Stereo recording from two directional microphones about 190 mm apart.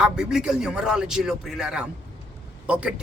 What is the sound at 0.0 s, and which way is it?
A man's voice, 5° right (ahead or behind).